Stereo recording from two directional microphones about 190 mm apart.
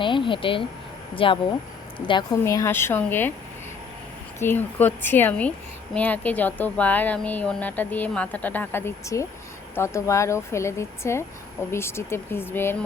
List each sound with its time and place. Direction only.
0.0 s speech: 25° left (ahead or behind)
2.4 s speech: 15° left (ahead or behind)
4.4 s speech: 10° left (ahead or behind)